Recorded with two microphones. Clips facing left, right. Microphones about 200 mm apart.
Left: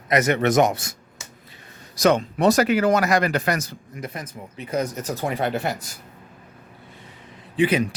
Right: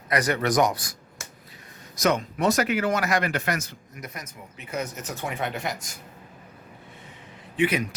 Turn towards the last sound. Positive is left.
turn(degrees=30)  # may be behind; listen again after turning